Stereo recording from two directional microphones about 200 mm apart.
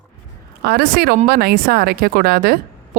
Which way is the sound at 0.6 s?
50° right (ahead or behind).